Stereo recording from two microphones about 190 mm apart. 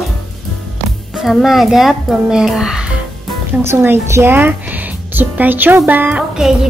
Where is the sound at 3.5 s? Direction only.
10° right (ahead or behind).